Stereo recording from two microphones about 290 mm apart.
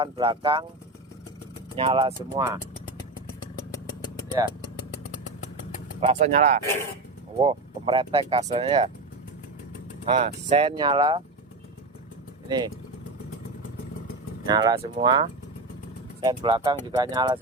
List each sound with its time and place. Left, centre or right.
0.0 s speech: centre
1.7 s speech: centre
6.0 s speech: right
10.1 s speech: centre
12.5 s speech: centre
14.4 s speech: centre